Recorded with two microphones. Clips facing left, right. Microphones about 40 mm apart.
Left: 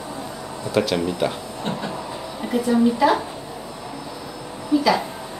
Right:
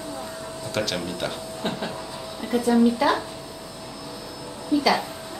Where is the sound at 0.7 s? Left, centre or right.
Centre.